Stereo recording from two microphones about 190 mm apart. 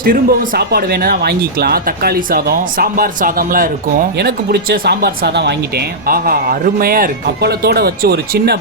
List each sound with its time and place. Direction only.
0.0 s speech: 50° right (ahead or behind)
4.2 s speech: 55° right (ahead or behind)